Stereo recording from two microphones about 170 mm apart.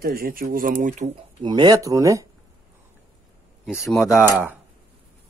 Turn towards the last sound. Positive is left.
turn(degrees=-10)  # may be behind; listen again after turning